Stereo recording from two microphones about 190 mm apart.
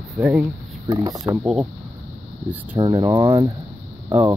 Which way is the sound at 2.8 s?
20° right (ahead or behind).